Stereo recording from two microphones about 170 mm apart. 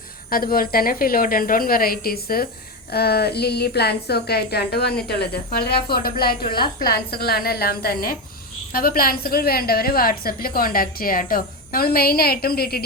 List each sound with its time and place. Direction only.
0.3 s a woman's voice: 60° left (ahead or behind)